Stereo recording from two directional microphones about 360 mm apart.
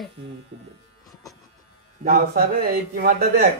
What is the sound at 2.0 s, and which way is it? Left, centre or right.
A man's voice, right.